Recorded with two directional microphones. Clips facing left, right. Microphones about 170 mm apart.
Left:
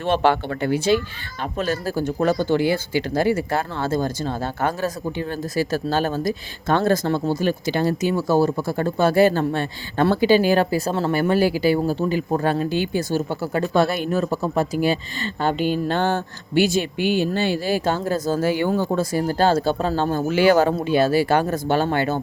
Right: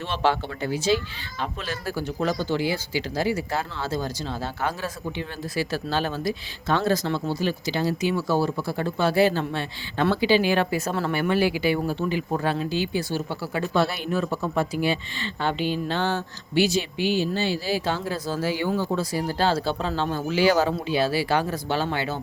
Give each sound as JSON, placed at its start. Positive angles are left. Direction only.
{"t": 0.0, "sound": "speech", "side_deg": 55}